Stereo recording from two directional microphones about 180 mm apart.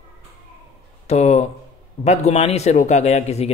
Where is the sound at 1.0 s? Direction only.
40° left (ahead or behind).